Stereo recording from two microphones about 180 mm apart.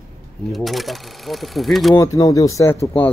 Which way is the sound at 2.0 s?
20° left (ahead or behind).